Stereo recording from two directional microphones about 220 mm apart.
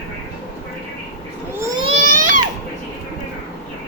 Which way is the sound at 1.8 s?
30° right (ahead or behind).